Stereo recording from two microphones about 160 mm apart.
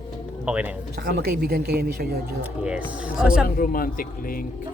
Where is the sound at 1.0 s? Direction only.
85° right.